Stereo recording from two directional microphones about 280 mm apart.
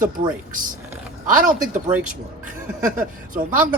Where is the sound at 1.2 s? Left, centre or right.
Right.